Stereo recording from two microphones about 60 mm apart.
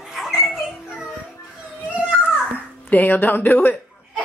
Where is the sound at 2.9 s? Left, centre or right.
Left.